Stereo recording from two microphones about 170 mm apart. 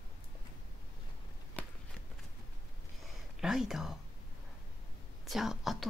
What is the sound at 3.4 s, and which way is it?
Speech, 5° right (ahead or behind).